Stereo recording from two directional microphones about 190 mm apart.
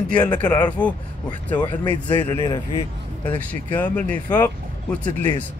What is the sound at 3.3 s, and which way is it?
Speech, 10° left (ahead or behind).